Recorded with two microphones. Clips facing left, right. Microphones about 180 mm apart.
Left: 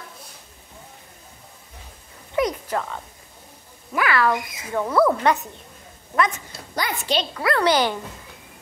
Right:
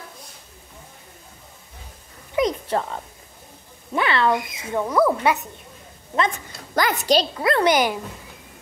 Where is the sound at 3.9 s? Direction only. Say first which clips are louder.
Right 1 dB; 25° right (ahead or behind).